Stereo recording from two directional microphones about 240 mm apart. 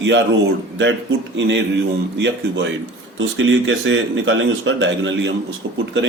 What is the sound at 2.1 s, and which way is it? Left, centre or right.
A man's voice, right.